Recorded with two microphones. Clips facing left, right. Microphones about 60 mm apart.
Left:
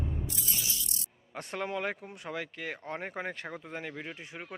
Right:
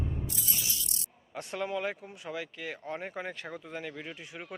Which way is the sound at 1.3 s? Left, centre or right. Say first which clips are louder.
Right 1 dB; left.